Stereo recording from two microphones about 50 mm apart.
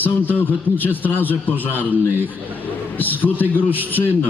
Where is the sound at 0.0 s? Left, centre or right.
Left.